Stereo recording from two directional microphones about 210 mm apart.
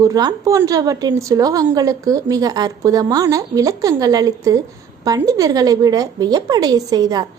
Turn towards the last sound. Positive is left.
turn(degrees=-20)  # may be behind; listen again after turning